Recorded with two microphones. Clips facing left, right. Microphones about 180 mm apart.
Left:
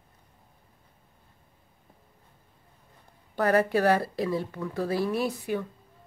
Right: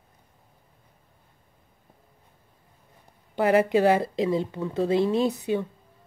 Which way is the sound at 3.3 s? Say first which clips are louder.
Right 3 dB; 20° right (ahead or behind).